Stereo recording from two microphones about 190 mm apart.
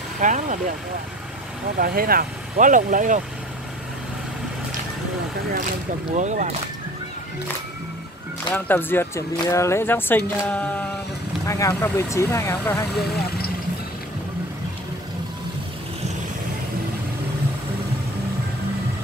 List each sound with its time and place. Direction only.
0.2 s speech: 40° right (ahead or behind)
1.8 s speech: 50° right (ahead or behind)
6.1 s speech: 40° right (ahead or behind)
8.5 s speech: 10° left (ahead or behind)